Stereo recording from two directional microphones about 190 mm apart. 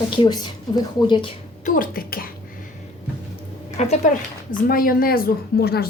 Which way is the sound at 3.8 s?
40° left (ahead or behind).